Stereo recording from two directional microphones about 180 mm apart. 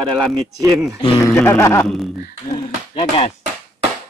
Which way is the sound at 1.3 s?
10° left (ahead or behind).